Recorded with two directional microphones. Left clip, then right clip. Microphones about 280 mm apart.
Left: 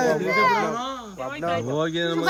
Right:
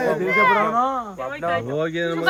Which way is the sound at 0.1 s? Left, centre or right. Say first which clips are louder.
Right 3 dB; left.